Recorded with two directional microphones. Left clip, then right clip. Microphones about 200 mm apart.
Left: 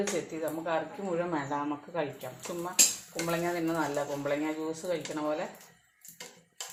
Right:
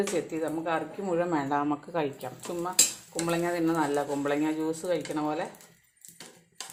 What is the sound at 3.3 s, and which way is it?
Speech, 40° right (ahead or behind).